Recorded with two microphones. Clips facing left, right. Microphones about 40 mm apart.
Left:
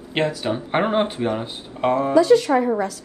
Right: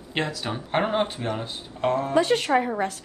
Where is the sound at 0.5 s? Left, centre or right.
Centre.